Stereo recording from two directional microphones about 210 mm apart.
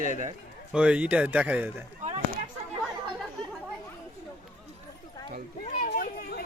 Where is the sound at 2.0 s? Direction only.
35° right (ahead or behind).